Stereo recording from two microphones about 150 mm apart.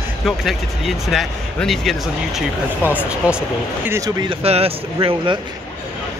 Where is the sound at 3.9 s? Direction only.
20° right (ahead or behind).